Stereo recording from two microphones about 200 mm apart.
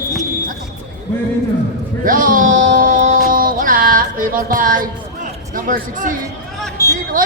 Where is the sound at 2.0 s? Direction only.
45° right (ahead or behind).